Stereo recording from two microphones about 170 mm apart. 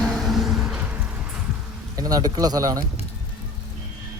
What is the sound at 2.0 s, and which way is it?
Speech, 20° right (ahead or behind).